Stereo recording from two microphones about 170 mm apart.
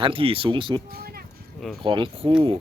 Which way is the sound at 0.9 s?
60° right (ahead or behind).